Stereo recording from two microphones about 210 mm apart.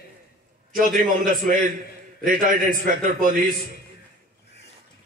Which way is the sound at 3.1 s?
40° right (ahead or behind).